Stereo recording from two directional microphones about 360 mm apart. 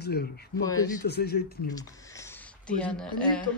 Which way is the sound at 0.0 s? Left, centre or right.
Left.